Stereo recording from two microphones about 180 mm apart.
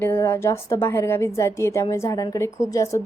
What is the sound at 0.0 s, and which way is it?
A woman's voice, 15° left (ahead or behind).